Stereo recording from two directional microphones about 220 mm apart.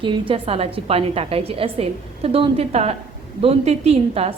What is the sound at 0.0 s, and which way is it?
A woman's voice, 20° right (ahead or behind).